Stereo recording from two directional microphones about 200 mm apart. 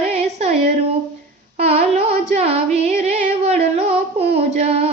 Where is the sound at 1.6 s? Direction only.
30° right (ahead or behind).